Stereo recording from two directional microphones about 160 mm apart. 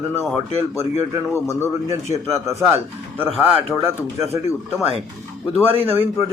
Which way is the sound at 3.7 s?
15° left (ahead or behind).